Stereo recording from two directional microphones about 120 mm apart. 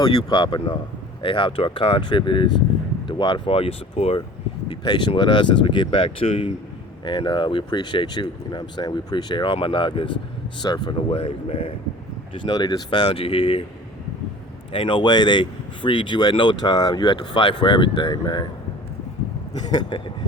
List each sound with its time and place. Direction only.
0.0 s speech: 40° left (ahead or behind); by 4.2 s 55° left (ahead or behind)
4.7 s speech: 40° left (ahead or behind)
12.5 s speech: 35° left (ahead or behind)
13.1 s speech: 50° left (ahead or behind)
14.7 s speech: 45° left (ahead or behind)
19.5 s speech: 35° left (ahead or behind)